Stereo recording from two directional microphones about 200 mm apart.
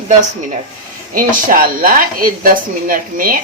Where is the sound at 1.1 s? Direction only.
45° right (ahead or behind).